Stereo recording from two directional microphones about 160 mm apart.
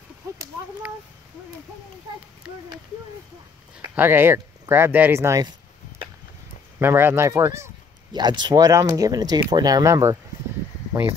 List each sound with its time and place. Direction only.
3.9 s speech: 15° right (ahead or behind)
6.8 s speech: 15° right (ahead or behind)